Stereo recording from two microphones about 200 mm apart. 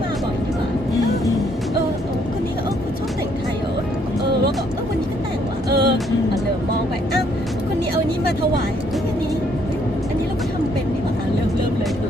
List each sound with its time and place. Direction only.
5.6 s music: 50° right (ahead or behind)